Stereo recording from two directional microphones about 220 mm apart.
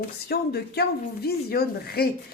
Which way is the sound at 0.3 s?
45° left (ahead or behind).